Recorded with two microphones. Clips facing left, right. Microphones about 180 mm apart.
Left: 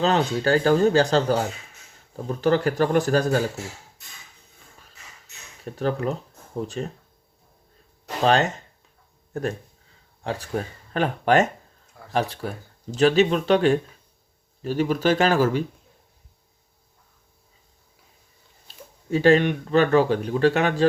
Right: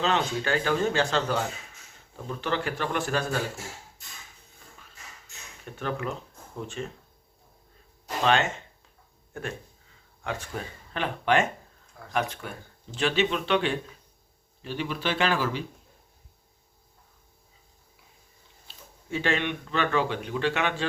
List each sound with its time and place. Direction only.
0.0 s speech: 40° left (ahead or behind)
5.6 s speech: 35° left (ahead or behind)
8.2 s speech: 35° left (ahead or behind)
19.1 s speech: 40° left (ahead or behind)